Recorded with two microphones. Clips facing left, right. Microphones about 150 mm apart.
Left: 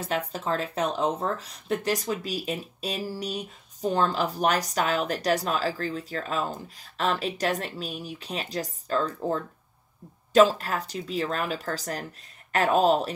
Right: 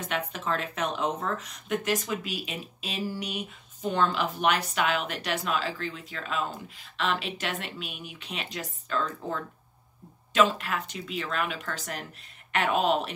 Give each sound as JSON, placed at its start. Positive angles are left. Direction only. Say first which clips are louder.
{"t": 0.0, "sound": "speech", "louder": "left 3 dB", "side_deg": 35}